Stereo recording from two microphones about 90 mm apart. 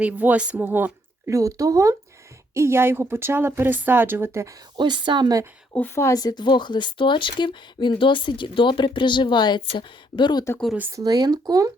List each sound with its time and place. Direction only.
0.0 s a woman's voice: 15° right (ahead or behind)
1.3 s a woman's voice: 35° right (ahead or behind)
4.8 s a woman's voice: 60° right (ahead or behind)
5.7 s a woman's voice: 25° left (ahead or behind)
6.1 s speech: 50° left (ahead or behind)
10.9 s speech: 45° right (ahead or behind)